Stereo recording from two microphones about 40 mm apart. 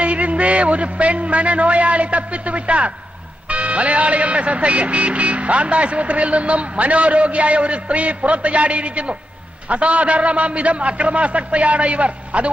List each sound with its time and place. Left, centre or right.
0.0 s speech: right